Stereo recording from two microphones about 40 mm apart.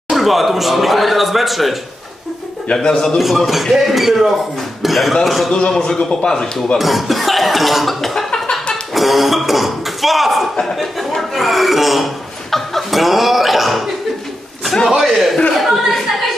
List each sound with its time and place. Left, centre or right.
0.1 s speech: centre
2.7 s speech: centre
3.2 s speech: centre
4.8 s a sound: centre
5.2 s speech: centre
5.7 s speech: centre
6.8 s cough: centre
8.3 s a sound: centre
8.9 s speech: centre
12.4 s chuckle: centre
14.6 s a sound: centre
15.0 s speech: centre
15.6 s a sound: centre